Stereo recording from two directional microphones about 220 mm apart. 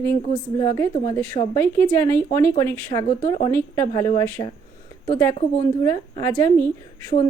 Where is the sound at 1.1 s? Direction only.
10° left (ahead or behind).